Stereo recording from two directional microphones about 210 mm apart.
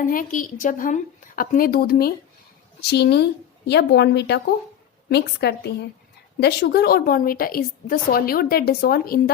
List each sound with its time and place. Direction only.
0.0 s a woman's voice: 40° left (ahead or behind)